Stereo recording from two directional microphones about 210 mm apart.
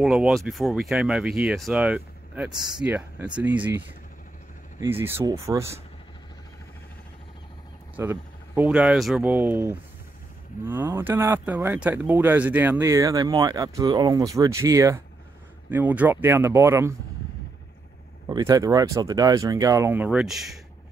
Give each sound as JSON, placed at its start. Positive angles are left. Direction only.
{"t": 0.0, "sound": "speech", "side_deg": 0}
{"t": 7.9, "sound": "speech", "side_deg": -10}
{"t": 18.3, "sound": "speech", "side_deg": -15}